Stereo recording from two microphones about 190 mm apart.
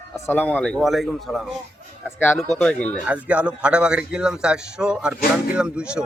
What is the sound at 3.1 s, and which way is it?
A man's voice, 5° right (ahead or behind).